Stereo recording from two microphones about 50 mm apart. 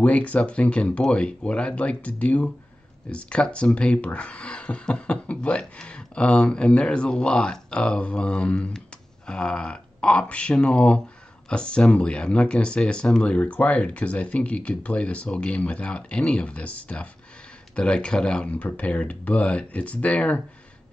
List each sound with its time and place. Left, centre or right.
0.0 s speech: left